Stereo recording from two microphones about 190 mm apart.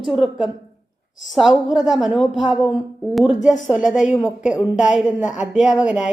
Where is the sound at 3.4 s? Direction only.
40° left (ahead or behind).